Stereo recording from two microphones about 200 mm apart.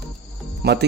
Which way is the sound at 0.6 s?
55° right (ahead or behind).